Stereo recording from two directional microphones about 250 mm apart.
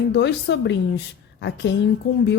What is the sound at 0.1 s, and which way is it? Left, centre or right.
Speech, left.